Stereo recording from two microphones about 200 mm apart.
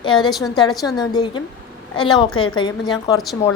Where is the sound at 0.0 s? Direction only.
25° left (ahead or behind).